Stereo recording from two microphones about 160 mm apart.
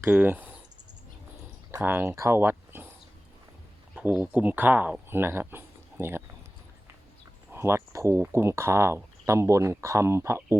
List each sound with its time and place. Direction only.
0.0 s speech: 10° right (ahead or behind)
1.7 s speech: 15° right (ahead or behind)
3.9 s speech: 10° right (ahead or behind)
7.5 s speech: 15° right (ahead or behind)